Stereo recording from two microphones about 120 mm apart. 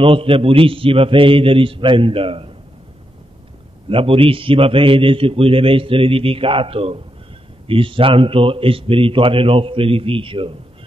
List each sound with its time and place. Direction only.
0.0 s a man's voice: 50° right (ahead or behind)
3.9 s a man's voice: 50° right (ahead or behind)